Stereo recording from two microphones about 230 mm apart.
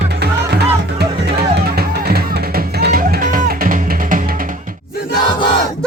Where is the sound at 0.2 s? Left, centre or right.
Right.